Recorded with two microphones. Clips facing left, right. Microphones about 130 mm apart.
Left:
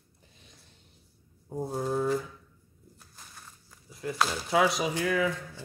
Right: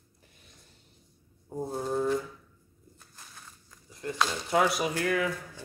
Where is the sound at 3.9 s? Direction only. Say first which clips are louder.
Left 1 dB; 5° left (ahead or behind).